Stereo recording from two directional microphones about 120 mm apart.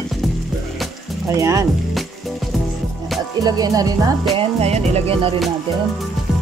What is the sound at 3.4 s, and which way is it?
Speech, 30° right (ahead or behind).